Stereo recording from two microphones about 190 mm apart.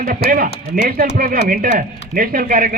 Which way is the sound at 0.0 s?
45° right (ahead or behind).